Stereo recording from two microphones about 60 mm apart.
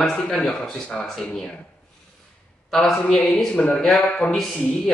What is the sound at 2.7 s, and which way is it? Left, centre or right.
A man's voice, centre.